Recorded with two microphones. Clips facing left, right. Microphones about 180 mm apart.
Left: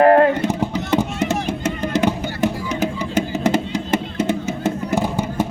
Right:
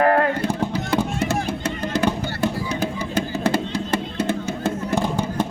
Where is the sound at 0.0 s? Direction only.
30° left (ahead or behind).